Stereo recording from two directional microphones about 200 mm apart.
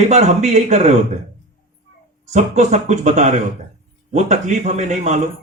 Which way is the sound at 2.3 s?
35° right (ahead or behind).